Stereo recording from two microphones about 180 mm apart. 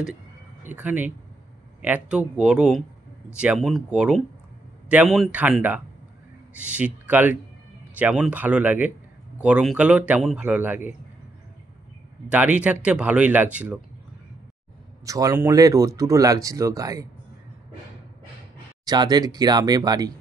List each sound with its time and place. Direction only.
0.7 s a man's voice: 10° right (ahead or behind)
12.3 s a man's voice: 5° right (ahead or behind)
15.0 s speech: 20° right (ahead or behind)
18.9 s speech: 20° right (ahead or behind)